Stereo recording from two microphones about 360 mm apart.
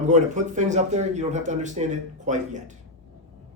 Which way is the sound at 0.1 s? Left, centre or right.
Right.